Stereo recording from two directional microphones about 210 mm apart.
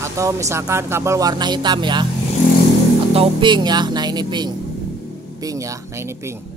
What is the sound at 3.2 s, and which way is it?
Music, 25° right (ahead or behind).